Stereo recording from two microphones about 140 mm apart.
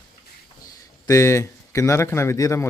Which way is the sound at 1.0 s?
20° left (ahead or behind).